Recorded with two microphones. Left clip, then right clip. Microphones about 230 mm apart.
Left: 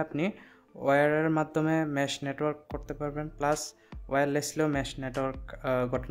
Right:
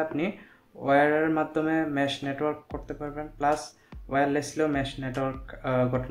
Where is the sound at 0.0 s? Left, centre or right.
Left.